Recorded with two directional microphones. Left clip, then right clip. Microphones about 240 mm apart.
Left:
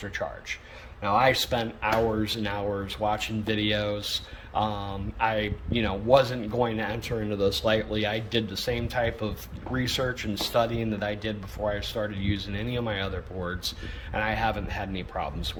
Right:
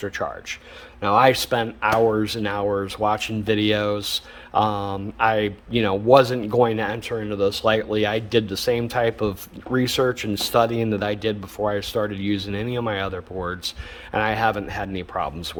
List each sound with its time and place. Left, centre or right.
0.0 s speech: right
14.1 s speech: right